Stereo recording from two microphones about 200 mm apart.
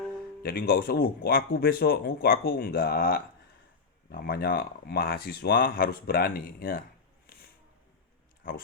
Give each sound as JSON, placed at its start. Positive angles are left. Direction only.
{"t": 0.4, "sound": "speech", "side_deg": 50}
{"t": 7.3, "sound": "a sound", "side_deg": 45}
{"t": 8.4, "sound": "speech", "side_deg": 45}